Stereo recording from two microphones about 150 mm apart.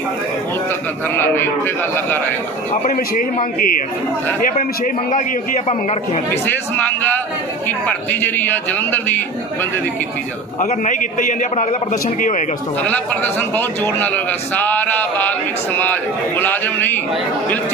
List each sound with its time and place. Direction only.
0.7 s a man's voice: 15° left (ahead or behind)
2.8 s a man's voice: 60° left (ahead or behind)
6.7 s a man's voice: 10° left (ahead or behind)
10.6 s a man's voice: 55° left (ahead or behind)
12.8 s a man's voice: 10° left (ahead or behind)